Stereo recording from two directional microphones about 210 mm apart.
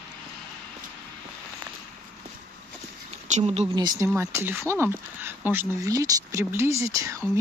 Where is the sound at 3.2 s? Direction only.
30° right (ahead or behind).